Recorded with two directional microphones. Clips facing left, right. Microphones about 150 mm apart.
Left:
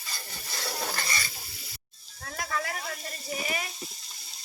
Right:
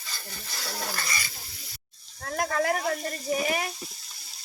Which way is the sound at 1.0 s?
30° left (ahead or behind).